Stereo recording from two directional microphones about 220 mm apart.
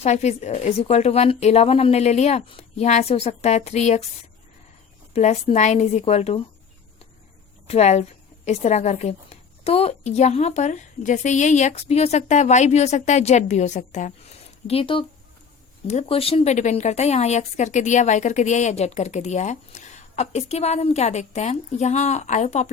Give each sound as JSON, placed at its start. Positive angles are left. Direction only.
{"t": 0.0, "sound": "speech", "side_deg": 30}
{"t": 5.1, "sound": "speech", "side_deg": 30}
{"t": 7.7, "sound": "speech", "side_deg": 30}